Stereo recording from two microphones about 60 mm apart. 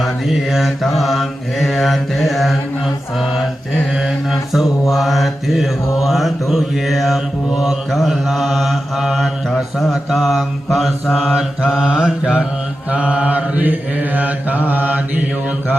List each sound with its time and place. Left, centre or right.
0.0 s mantra: centre; by 15.2 s right